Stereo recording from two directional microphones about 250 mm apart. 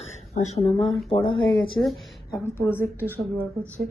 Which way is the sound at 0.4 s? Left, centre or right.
Left.